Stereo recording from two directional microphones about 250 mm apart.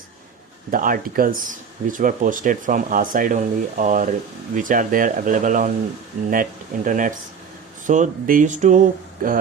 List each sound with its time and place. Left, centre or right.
0.7 s speech: right